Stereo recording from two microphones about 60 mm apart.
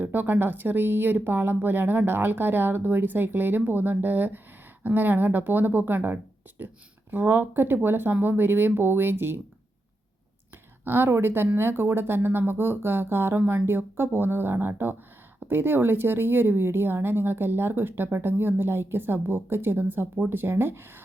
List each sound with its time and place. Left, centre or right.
0.0 s speech: right
10.8 s speech: right